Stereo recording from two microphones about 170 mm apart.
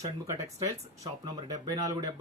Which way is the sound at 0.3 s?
20° right (ahead or behind).